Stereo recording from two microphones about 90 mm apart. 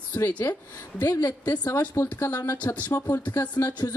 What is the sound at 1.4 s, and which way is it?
Speech, 15° left (ahead or behind).